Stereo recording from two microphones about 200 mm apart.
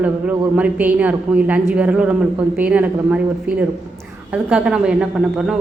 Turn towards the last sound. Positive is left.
turn(degrees=-5)  # may be behind; listen again after turning